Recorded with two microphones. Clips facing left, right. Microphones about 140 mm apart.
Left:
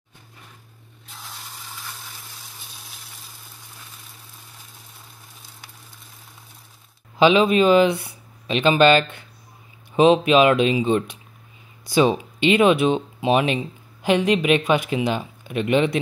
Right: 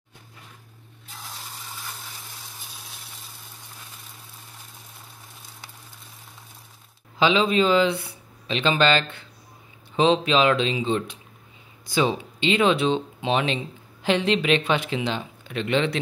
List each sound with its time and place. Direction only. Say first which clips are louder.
7.2 s speech: left 4 dB; 15° left (ahead or behind)